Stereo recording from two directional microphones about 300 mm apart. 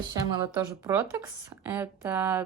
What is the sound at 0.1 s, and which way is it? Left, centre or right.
A woman's voice, centre.